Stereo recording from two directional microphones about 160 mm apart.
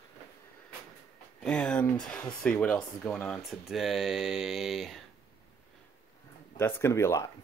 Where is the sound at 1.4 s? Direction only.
5° left (ahead or behind).